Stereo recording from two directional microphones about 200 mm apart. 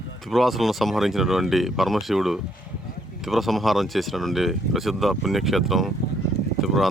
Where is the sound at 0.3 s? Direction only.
Centre (ahead or behind).